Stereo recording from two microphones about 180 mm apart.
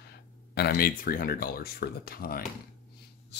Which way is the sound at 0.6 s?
60° left (ahead or behind).